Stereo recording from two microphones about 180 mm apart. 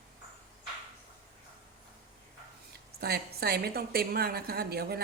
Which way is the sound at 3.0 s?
60° right (ahead or behind).